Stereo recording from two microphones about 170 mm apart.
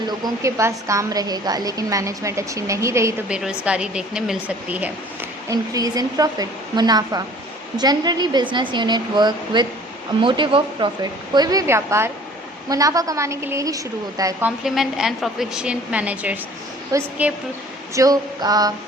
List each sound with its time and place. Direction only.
0.4 s a woman's voice: 20° right (ahead or behind)
3.2 s speech: 5° right (ahead or behind)
5.5 s a woman's voice: 20° right (ahead or behind)
14.4 s a woman's voice: 5° right (ahead or behind)
17.9 s a woman's voice: 20° right (ahead or behind)